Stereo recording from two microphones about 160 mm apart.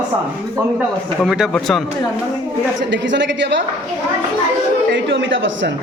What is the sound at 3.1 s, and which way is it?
Speech, 90° right.